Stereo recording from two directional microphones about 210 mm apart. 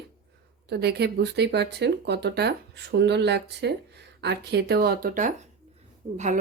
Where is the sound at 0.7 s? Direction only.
50° right (ahead or behind).